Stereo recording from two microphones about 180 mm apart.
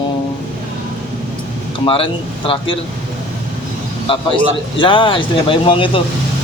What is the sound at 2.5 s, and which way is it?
Speech, 30° left (ahead or behind).